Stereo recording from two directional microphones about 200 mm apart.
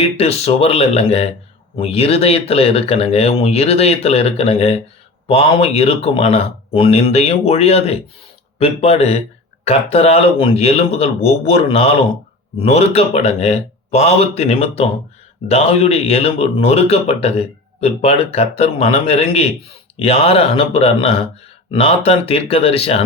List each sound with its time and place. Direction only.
0.0 s a man's voice: 30° left (ahead or behind)